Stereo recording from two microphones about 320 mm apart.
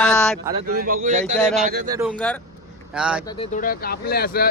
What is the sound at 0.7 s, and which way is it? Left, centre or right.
Speech, right.